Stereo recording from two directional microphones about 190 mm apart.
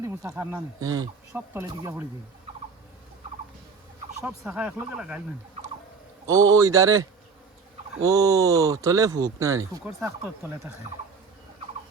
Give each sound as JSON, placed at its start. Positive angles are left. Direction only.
{"t": 0.0, "sound": "speech", "side_deg": -15}
{"t": 4.3, "sound": "speech", "side_deg": -5}
{"t": 6.2, "sound": "speech", "side_deg": -20}